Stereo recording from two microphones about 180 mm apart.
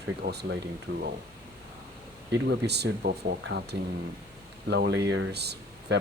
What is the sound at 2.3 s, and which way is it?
A man's voice, 65° right (ahead or behind).